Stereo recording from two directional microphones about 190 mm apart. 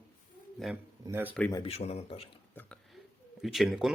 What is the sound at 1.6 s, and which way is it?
Speech, 30° left (ahead or behind).